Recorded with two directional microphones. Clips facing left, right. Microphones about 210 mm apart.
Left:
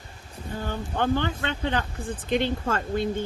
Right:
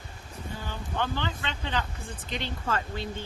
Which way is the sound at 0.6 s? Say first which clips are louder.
Left 6 dB; 50° left (ahead or behind).